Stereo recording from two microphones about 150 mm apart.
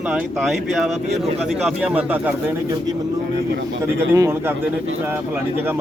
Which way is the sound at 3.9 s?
20° right (ahead or behind).